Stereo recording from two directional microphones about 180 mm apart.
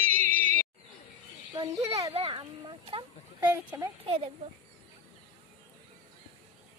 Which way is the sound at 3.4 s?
10° right (ahead or behind).